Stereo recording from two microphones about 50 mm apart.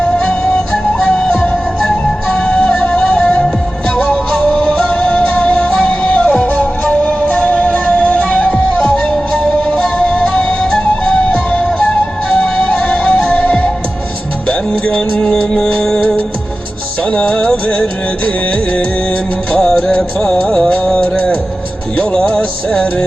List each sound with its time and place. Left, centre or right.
1.0 s music: centre
2.2 s music: left
14.4 s music: left
14.9 s music: centre
19.5 s music: centre